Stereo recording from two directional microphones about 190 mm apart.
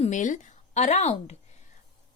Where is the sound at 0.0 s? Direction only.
40° left (ahead or behind).